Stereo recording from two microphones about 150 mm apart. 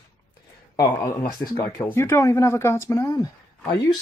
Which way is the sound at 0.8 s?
15° left (ahead or behind).